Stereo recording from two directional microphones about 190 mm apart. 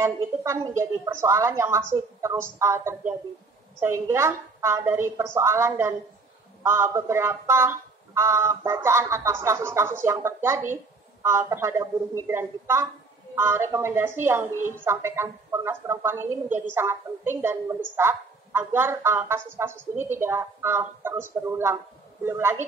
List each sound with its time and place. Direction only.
0.0 s a woman's voice: 15° right (ahead or behind)